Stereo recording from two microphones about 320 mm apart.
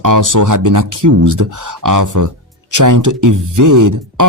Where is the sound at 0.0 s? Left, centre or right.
Right.